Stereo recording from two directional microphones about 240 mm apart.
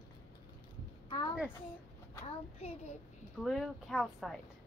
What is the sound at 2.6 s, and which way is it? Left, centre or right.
Speech, left.